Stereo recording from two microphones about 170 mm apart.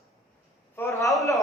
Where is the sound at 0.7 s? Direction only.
15° left (ahead or behind).